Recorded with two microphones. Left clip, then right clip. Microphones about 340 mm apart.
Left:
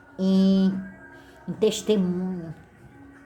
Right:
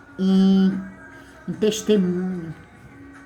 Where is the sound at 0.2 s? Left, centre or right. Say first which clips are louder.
Right 2 dB; centre.